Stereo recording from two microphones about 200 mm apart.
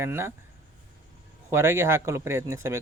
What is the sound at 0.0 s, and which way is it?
Speech, 10° right (ahead or behind).